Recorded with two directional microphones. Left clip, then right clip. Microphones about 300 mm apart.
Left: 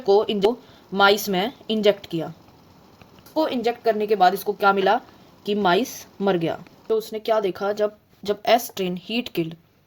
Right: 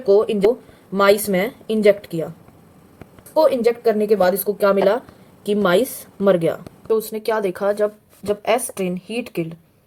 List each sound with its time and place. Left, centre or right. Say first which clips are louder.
0.0 s speech: right 3 dB; centre
3.3 s a woman's voice: right 7 dB; centre